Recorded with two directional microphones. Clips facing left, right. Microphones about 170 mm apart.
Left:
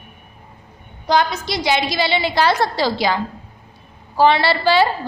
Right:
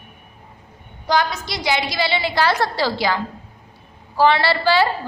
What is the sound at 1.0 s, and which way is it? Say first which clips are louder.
A woman's voice: left 2 dB; 25° left (ahead or behind).